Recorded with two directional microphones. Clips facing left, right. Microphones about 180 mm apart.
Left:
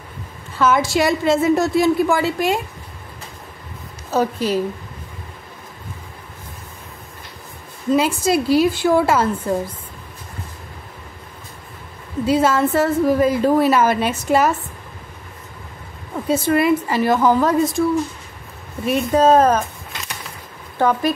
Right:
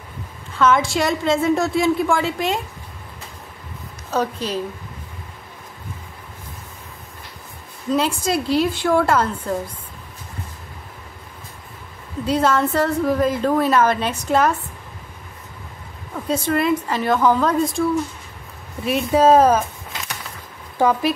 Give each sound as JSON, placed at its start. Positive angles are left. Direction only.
{"t": 0.6, "sound": "a woman's voice", "side_deg": 5}
{"t": 4.1, "sound": "a woman's voice", "side_deg": 5}
{"t": 7.9, "sound": "a woman's voice", "side_deg": 5}
{"t": 12.3, "sound": "a woman's voice", "side_deg": 5}
{"t": 16.3, "sound": "a woman's voice", "side_deg": 5}
{"t": 18.9, "sound": "a woman's voice", "side_deg": -5}
{"t": 20.7, "sound": "speech", "side_deg": -10}